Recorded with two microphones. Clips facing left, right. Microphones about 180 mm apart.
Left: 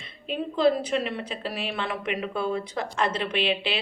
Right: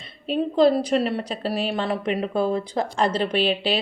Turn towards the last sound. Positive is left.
turn(degrees=-40)  # may be behind; listen again after turning